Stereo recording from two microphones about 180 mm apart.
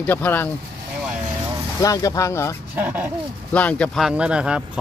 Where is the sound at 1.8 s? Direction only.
20° left (ahead or behind).